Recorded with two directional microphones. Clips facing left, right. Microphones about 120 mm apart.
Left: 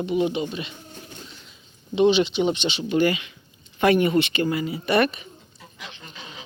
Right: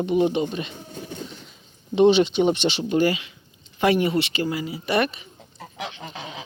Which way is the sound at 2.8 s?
35° right (ahead or behind).